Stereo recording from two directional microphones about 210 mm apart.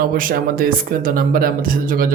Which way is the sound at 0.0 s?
45° right (ahead or behind).